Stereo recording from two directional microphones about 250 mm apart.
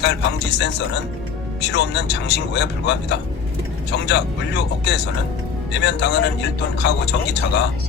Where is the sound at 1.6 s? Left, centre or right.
Left.